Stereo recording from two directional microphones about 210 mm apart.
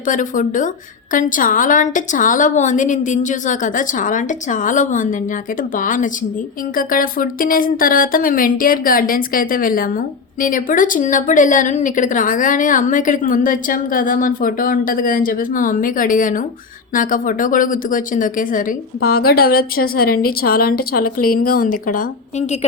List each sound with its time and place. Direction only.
0.0 s a woman's voice: 40° left (ahead or behind)